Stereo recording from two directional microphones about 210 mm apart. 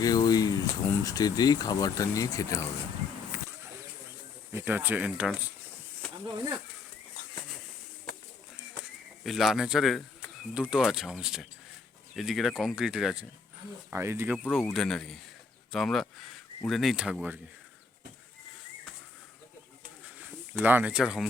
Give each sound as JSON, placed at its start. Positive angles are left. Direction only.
{"t": 0.0, "sound": "speech", "side_deg": 20}
{"t": 4.5, "sound": "speech", "side_deg": -10}
{"t": 9.2, "sound": "speech", "side_deg": 0}
{"t": 14.3, "sound": "speech", "side_deg": 0}
{"t": 20.1, "sound": "speech", "side_deg": -5}